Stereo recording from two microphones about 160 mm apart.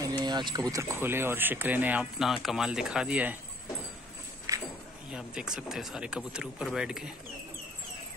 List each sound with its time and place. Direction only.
0.2 s speech: 25° right (ahead or behind); by 3.3 s 10° right (ahead or behind)
4.5 s a sound: 20° right (ahead or behind)
5.1 s speech: 5° right (ahead or behind)